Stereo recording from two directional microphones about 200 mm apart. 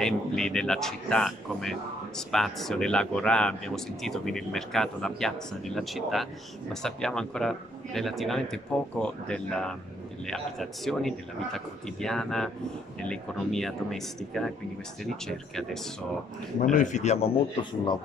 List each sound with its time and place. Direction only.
0.0 s speech: 5° left (ahead or behind)
16.6 s a man's voice: 40° left (ahead or behind)